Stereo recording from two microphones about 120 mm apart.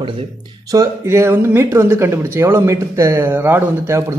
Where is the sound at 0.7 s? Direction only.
25° right (ahead or behind).